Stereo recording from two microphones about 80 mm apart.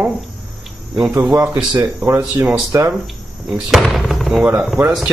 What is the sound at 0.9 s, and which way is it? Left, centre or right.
Speech, centre.